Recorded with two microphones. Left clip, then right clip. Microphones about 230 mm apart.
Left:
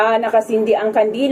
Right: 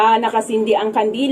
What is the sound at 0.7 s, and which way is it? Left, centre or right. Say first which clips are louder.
Speech: left 1 dB; right.